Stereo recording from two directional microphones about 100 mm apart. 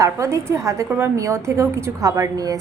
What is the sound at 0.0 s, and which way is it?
A woman's voice, 30° right (ahead or behind).